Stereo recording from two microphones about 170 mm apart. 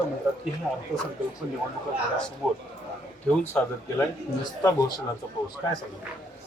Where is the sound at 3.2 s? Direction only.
10° left (ahead or behind).